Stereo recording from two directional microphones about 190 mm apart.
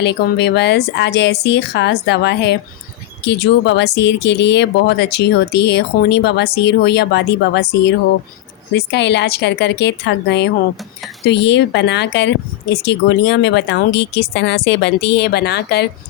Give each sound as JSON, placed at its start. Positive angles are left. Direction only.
{"t": 0.0, "sound": "speech", "side_deg": 60}